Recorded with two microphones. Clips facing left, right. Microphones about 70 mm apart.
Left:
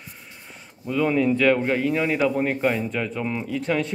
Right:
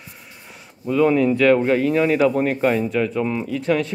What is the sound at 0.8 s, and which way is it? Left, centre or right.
Speech, centre.